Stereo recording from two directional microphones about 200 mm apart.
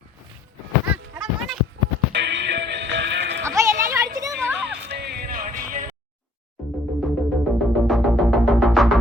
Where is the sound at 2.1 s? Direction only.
60° right (ahead or behind).